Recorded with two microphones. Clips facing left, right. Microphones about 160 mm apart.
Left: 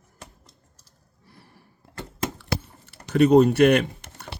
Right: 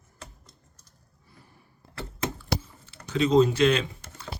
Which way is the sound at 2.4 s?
70° left (ahead or behind).